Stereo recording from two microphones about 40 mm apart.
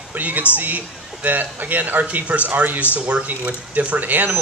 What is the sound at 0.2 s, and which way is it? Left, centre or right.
Speech, right.